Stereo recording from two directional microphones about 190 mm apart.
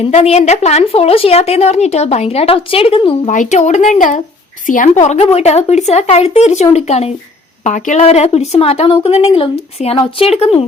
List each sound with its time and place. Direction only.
0.1 s speech: 35° left (ahead or behind)